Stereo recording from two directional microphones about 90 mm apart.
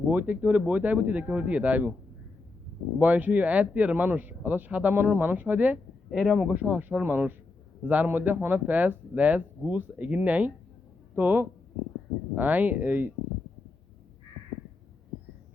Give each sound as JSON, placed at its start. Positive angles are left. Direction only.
{"t": 0.1, "sound": "speech", "side_deg": -20}
{"t": 3.0, "sound": "speech", "side_deg": -20}
{"t": 6.1, "sound": "speech", "side_deg": 0}